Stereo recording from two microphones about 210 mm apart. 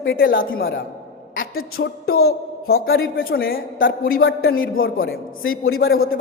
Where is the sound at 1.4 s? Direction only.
75° left (ahead or behind).